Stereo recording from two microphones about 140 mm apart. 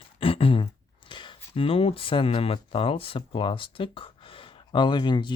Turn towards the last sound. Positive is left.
turn(degrees=35)  # may be behind; listen again after turning